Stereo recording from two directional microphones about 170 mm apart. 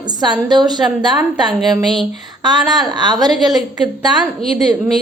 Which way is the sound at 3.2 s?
Centre (ahead or behind).